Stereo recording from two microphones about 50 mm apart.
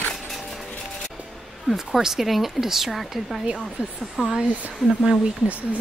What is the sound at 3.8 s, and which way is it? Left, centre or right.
Speech, right.